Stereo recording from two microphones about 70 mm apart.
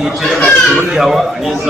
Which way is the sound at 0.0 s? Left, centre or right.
Centre.